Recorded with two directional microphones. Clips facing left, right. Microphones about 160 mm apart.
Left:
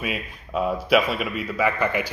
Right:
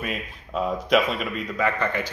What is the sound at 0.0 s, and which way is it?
A man's voice, 5° left (ahead or behind).